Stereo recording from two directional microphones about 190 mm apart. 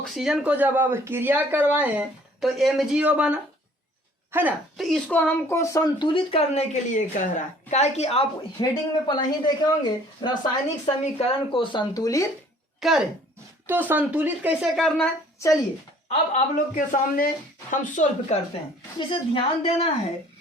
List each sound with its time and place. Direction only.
0.0 s a woman's voice: centre (ahead or behind)
4.8 s a woman's voice: 5° left (ahead or behind); by 10.5 s 25° left (ahead or behind)
10.8 s a woman's voice: 35° left (ahead or behind); by 12.2 s 20° left (ahead or behind)
12.8 s speech: centre (ahead or behind)
16.3 s speech: 40° left (ahead or behind)
18.9 s a woman's voice: 25° left (ahead or behind)